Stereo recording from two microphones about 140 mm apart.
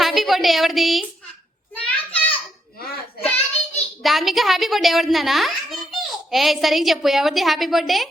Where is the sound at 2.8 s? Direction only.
90° left.